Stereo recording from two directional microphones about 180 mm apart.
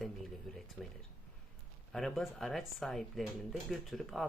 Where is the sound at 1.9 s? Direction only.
Centre (ahead or behind).